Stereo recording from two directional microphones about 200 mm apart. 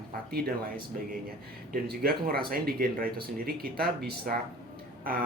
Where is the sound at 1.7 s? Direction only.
50° right (ahead or behind).